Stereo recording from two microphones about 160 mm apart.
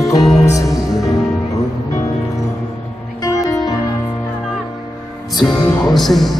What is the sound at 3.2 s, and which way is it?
Music, 25° left (ahead or behind).